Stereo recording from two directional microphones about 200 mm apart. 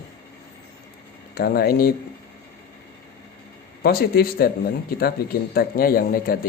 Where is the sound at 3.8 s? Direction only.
50° left (ahead or behind).